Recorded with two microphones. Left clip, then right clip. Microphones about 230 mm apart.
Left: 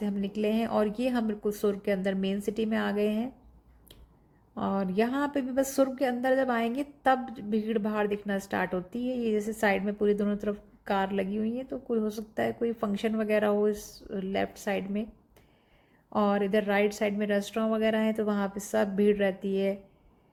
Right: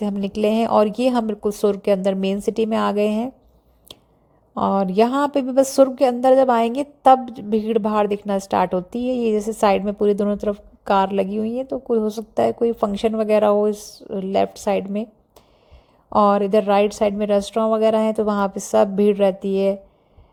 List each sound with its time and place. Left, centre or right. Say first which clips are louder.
0.0 s a woman's voice: right 10 dB; right
4.5 s a woman's voice: right 11 dB; right